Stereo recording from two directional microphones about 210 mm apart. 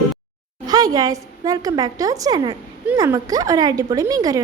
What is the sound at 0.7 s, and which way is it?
A woman's voice, 20° right (ahead or behind).